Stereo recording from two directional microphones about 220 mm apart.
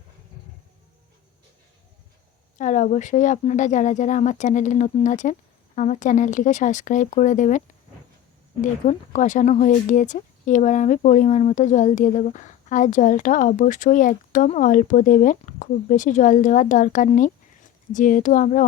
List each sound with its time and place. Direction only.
2.6 s speech: 35° left (ahead or behind)
8.6 s speech: 35° left (ahead or behind)